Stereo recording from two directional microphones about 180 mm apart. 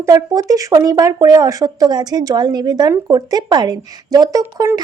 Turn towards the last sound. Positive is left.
turn(degrees=-20)  # may be behind; listen again after turning